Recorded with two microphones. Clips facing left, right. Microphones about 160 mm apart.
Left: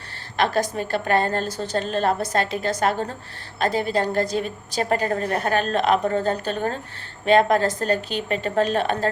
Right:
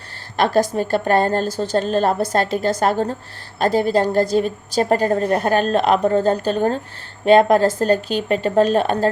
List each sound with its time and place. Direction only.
0.3 s a woman's voice: 35° right (ahead or behind)